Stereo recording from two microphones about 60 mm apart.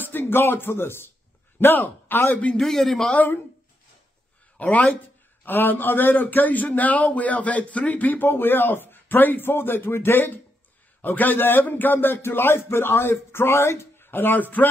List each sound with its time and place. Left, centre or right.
0.0 s a man's voice: left
2.3 s a man's voice: left
2.6 s a man's voice: centre
4.6 s a man's voice: left